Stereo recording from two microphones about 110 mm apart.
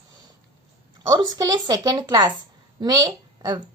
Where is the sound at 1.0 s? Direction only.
35° right (ahead or behind).